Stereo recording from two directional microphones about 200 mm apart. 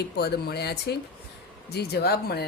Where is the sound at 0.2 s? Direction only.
55° left (ahead or behind).